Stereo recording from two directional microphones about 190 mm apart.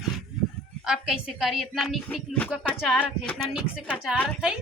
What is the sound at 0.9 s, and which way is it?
A woman's voice, 5° right (ahead or behind).